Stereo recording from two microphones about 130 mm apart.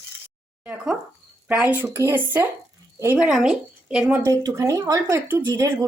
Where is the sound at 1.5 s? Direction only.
10° right (ahead or behind).